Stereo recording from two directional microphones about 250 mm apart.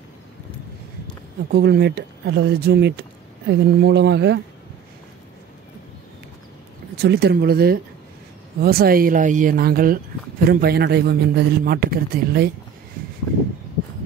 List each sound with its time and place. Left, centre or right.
1.5 s speech: right
7.0 s a man's voice: right